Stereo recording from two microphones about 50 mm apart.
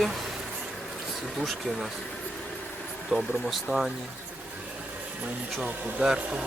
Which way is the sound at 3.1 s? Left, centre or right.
Centre.